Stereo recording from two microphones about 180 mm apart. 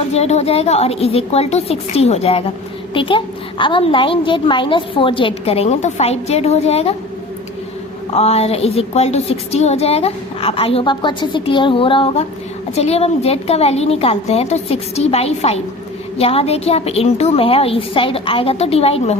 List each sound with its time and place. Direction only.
0.1 s a woman's voice: 35° left (ahead or behind)
8.1 s a woman's voice: 35° left (ahead or behind)